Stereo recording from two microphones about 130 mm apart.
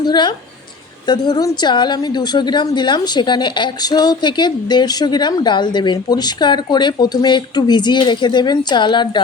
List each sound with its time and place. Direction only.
0.0 s a woman's voice: 35° left (ahead or behind)